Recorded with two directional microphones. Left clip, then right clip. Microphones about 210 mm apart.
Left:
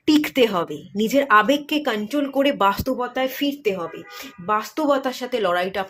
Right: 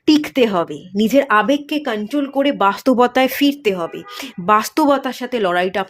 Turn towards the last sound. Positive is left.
turn(degrees=-30)  # may be behind; listen again after turning